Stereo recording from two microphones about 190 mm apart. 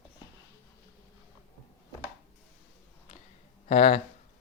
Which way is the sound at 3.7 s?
30° left (ahead or behind).